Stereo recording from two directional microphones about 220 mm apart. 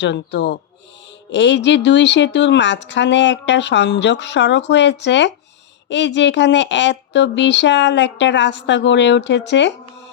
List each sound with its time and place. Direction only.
0.0 s a woman's voice: 50° left (ahead or behind)